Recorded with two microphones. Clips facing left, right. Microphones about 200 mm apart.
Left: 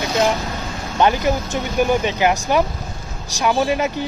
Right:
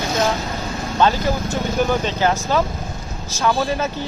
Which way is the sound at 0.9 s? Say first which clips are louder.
Left 1 dB; 15° left (ahead or behind).